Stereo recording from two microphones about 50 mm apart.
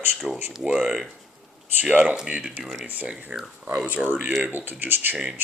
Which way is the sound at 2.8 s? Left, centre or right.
Right.